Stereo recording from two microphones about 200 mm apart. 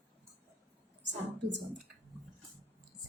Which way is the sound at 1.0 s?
60° right (ahead or behind).